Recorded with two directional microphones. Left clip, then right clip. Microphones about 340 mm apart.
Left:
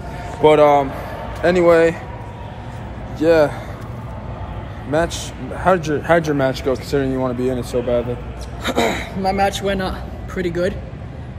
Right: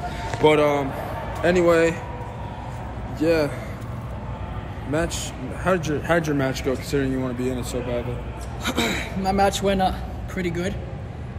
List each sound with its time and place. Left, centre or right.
0.4 s a man's voice: centre
3.2 s a man's voice: centre
4.9 s a man's voice: centre
9.4 s speech: centre
9.8 s a man's voice: centre